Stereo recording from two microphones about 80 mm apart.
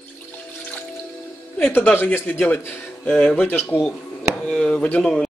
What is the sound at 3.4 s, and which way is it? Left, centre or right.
Speech, left.